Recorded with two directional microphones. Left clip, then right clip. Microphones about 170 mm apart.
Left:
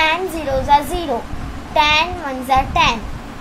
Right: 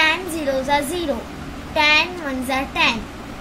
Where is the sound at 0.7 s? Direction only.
35° left (ahead or behind).